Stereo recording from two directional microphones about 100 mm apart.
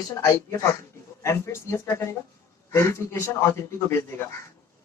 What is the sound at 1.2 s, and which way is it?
A man's voice, 30° left (ahead or behind).